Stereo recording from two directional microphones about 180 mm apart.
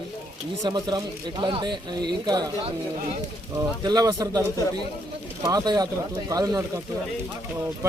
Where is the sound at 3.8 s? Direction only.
20° right (ahead or behind).